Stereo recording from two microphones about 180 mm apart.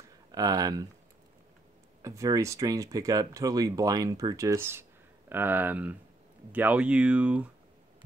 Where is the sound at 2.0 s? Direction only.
20° right (ahead or behind).